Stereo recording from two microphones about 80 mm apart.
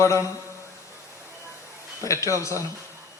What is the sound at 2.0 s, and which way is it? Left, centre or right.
Speech, left.